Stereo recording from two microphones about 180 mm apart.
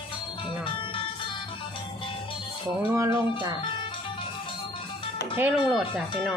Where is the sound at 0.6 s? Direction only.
30° left (ahead or behind).